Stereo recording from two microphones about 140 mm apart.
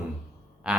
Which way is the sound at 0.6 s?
5° right (ahead or behind).